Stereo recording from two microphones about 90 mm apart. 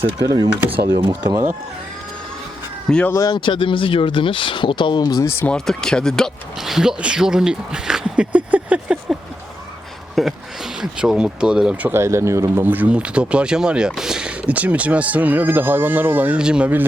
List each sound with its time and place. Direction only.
0.2 s speech: 45° right (ahead or behind)
0.7 s speech: 65° right (ahead or behind)
3.1 s speech: 35° left (ahead or behind)
3.3 s speech: 65° left (ahead or behind)
5.5 s speech: 5° left (ahead or behind); by 9.1 s 15° right (ahead or behind)
10.2 s speech: centre (ahead or behind)
11.9 s speech: 30° right (ahead or behind); by 16.6 s 10° right (ahead or behind)